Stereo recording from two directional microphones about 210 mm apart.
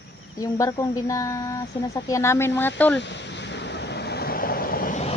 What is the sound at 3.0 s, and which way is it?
Vehicle, 55° left (ahead or behind).